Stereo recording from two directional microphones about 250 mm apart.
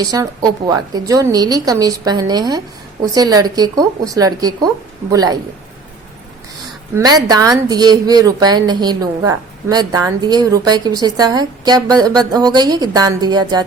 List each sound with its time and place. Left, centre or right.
0.0 s a woman's voice: centre
6.9 s a woman's voice: centre